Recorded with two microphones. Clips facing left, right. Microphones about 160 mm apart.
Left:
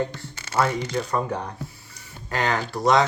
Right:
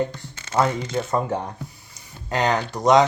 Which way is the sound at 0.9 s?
20° right (ahead or behind).